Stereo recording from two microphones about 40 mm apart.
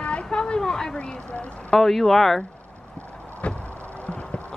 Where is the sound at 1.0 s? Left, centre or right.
Left.